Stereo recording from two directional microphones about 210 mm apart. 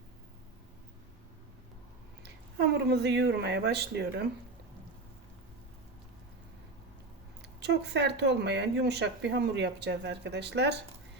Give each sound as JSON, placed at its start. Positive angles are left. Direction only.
{"t": 2.2, "sound": "speech", "side_deg": -50}
{"t": 7.6, "sound": "speech", "side_deg": -55}